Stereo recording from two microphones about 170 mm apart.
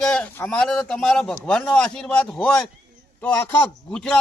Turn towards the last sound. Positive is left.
turn(degrees=5)  # may be behind; listen again after turning